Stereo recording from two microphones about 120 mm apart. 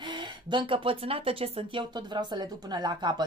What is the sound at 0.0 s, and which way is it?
Speech, 40° right (ahead or behind).